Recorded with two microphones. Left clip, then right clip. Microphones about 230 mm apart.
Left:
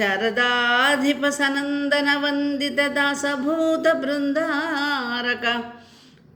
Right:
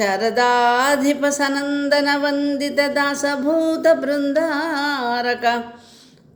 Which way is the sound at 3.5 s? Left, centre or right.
Right.